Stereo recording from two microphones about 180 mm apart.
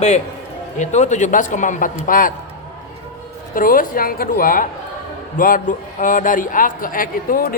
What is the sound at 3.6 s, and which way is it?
A man's voice, 50° left (ahead or behind).